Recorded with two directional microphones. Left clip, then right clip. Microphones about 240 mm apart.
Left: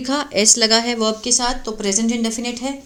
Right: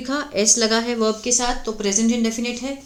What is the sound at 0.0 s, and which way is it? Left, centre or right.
Speech, left.